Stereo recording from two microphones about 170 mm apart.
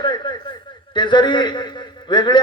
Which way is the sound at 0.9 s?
25° left (ahead or behind).